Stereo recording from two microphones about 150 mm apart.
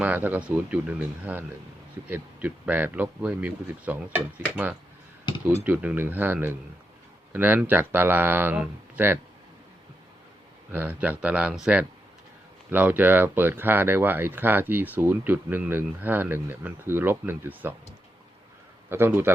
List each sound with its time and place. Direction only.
0.0 s speech: 10° right (ahead or behind)
5.6 s speech: 10° right (ahead or behind)
10.7 s speech: 10° right (ahead or behind)
18.9 s speech: 15° right (ahead or behind)